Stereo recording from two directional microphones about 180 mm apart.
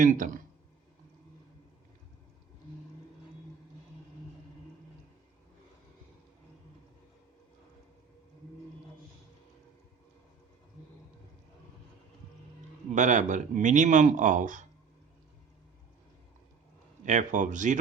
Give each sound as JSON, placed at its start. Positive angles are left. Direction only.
{"t": 0.0, "sound": "speech", "side_deg": -45}
{"t": 12.9, "sound": "speech", "side_deg": -45}
{"t": 17.1, "sound": "speech", "side_deg": -45}